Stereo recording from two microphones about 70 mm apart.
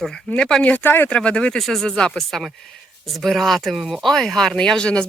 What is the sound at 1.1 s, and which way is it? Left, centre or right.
Speech, centre.